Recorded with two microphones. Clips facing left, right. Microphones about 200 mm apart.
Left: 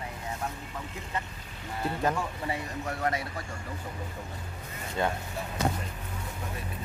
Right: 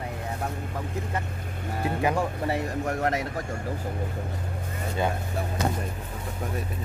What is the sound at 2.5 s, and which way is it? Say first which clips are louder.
Speech: right 6 dB; 45° right (ahead or behind).